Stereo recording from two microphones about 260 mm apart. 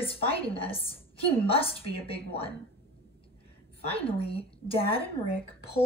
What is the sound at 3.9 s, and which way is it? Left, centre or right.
A woman's voice, left.